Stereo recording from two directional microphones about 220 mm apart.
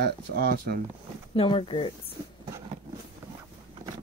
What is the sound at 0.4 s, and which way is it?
Speech, 45° right (ahead or behind).